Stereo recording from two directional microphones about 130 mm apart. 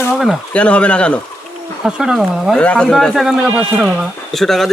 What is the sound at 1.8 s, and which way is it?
Speech, 5° right (ahead or behind).